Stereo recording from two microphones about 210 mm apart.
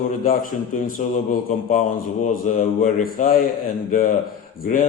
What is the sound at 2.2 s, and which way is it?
A man's voice, 40° left (ahead or behind).